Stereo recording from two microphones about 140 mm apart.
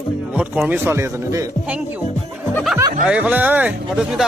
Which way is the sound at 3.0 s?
10° right (ahead or behind).